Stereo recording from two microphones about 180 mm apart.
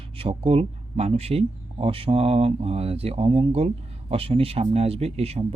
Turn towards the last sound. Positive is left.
turn(degrees=-35)  # may be behind; listen again after turning